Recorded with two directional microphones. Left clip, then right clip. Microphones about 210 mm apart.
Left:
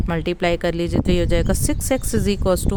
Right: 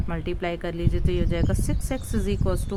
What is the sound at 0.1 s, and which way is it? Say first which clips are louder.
Speech: left 9 dB; 45° left (ahead or behind).